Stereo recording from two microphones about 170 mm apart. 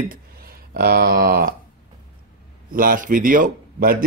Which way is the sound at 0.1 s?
60° right (ahead or behind).